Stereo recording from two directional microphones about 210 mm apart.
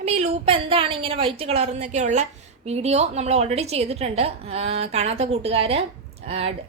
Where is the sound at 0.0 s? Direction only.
30° right (ahead or behind).